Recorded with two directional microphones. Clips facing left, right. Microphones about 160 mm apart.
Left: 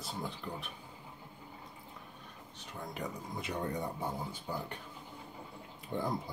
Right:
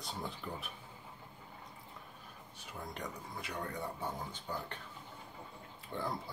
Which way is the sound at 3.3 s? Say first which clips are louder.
Left 5 dB; 20° left (ahead or behind).